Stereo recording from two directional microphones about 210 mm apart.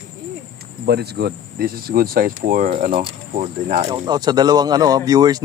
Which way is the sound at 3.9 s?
20° right (ahead or behind).